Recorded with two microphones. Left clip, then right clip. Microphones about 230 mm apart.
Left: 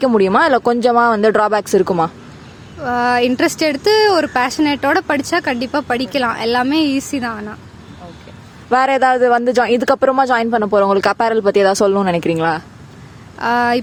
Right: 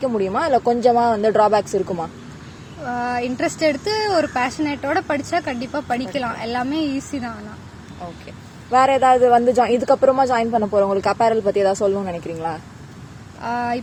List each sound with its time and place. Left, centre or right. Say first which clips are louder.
0.0 s speech: left 8 dB; left
8.7 s speech: left 1 dB; left